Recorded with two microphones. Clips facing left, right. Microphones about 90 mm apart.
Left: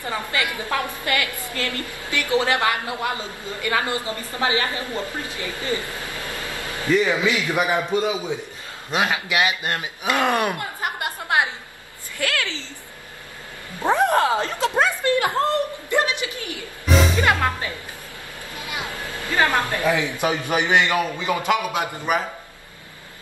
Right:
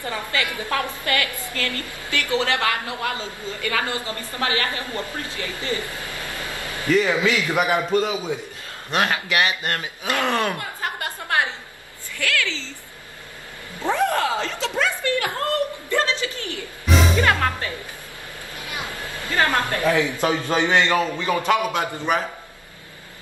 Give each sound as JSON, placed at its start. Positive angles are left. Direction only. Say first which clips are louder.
{"t": 0.0, "sound": "a woman's voice", "louder": "left 1 dB", "side_deg": 20}
{"t": 6.9, "sound": "a man's voice", "louder": "even", "side_deg": 20}
{"t": 13.9, "sound": "a woman's voice", "louder": "left 3 dB", "side_deg": 20}
{"t": 18.6, "sound": "a sound", "louder": "left 1 dB", "side_deg": 20}
{"t": 19.3, "sound": "a man's voice", "louder": "left 1 dB", "side_deg": 20}